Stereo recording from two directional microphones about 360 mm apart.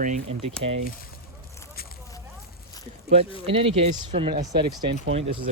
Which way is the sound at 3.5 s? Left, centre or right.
Centre.